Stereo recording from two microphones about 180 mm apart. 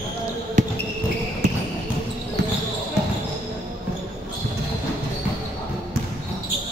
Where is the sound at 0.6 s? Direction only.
45° right (ahead or behind).